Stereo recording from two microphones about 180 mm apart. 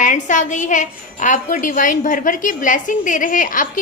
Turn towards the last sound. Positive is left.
turn(degrees=50)  # may be behind; listen again after turning